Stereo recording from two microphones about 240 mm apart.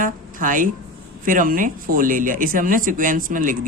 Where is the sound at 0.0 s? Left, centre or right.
Right.